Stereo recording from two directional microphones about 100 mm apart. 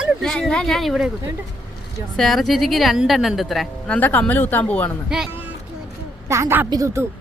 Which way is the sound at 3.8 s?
15° left (ahead or behind).